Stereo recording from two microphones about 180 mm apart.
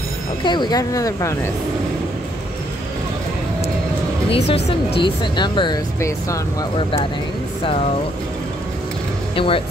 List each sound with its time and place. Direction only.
0.4 s speech: 25° left (ahead or behind)
4.3 s speech: 35° left (ahead or behind); by 6.4 s 15° left (ahead or behind)
9.3 s speech: 30° left (ahead or behind)